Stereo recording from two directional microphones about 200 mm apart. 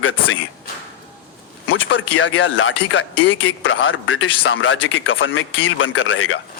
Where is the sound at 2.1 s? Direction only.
75° left (ahead or behind).